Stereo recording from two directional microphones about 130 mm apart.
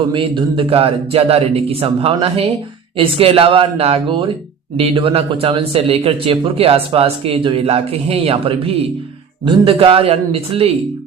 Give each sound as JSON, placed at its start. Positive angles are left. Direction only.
{"t": 0.1, "sound": "speech", "side_deg": -40}